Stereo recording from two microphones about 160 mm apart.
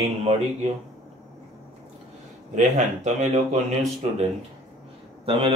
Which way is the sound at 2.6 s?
45° right (ahead or behind).